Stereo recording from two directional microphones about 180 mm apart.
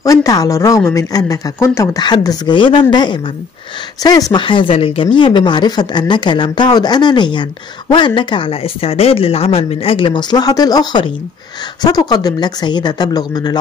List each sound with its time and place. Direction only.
0.0 s speech: 15° left (ahead or behind)